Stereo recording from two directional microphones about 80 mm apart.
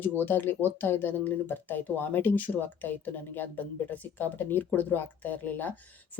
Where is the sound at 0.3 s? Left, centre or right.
Left.